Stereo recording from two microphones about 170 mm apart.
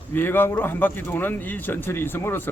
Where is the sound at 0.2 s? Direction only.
10° left (ahead or behind).